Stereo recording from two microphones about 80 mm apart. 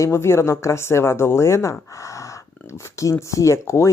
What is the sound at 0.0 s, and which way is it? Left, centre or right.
Speech, left.